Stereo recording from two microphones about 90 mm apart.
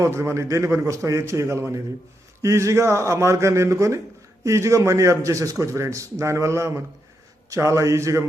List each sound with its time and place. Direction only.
0.0 s a man's voice: 30° right (ahead or behind)